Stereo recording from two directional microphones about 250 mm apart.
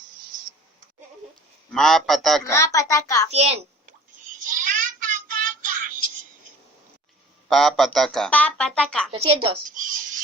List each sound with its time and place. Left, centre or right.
1.7 s speech: centre
2.5 s a child's voice: centre
3.3 s a sound: right
7.5 s speech: centre
9.1 s speech: right